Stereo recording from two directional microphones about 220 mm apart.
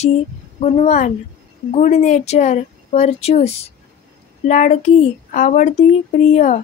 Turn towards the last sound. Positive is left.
turn(degrees=30)  # may be behind; listen again after turning